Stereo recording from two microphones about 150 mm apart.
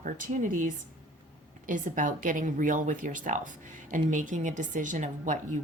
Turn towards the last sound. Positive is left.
turn(degrees=-55)  # may be behind; listen again after turning